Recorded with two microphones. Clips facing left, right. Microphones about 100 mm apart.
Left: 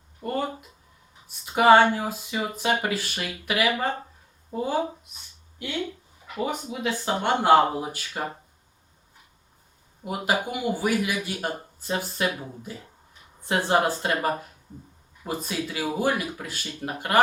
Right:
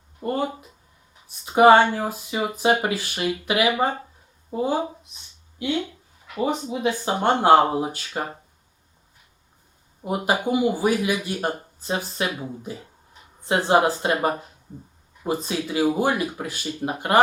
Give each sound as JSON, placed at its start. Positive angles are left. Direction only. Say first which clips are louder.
{"t": 0.2, "sound": "speech", "louder": "right 4 dB", "side_deg": -15}
{"t": 1.5, "sound": "speech", "louder": "right 3 dB", "side_deg": -25}
{"t": 6.4, "sound": "speech", "louder": "right 5 dB", "side_deg": -25}
{"t": 7.3, "sound": "speech", "louder": "right 3 dB", "side_deg": -35}
{"t": 7.7, "sound": "speech", "louder": "right 5 dB", "side_deg": -20}
{"t": 10.0, "sound": "speech", "louder": "right 3 dB", "side_deg": -25}